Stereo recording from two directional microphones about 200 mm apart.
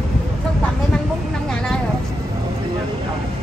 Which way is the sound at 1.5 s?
5° left (ahead or behind).